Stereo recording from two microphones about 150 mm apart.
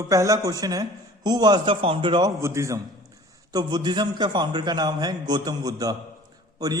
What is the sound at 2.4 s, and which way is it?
A man's voice, 20° right (ahead or behind).